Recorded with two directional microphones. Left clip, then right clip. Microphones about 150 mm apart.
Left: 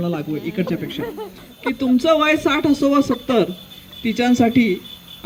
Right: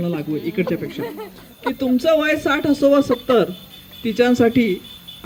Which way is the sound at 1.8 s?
45° left (ahead or behind).